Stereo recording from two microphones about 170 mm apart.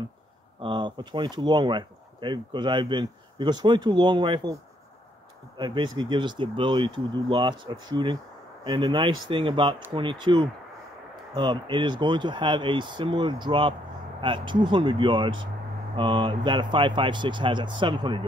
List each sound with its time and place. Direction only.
0.6 s speech: 30° right (ahead or behind)
5.6 s speech: 25° right (ahead or behind)